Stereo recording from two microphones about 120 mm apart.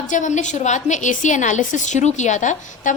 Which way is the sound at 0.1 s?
90° left.